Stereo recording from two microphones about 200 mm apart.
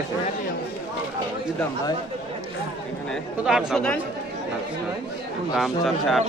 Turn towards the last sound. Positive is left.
turn(degrees=0)  # may be behind; listen again after turning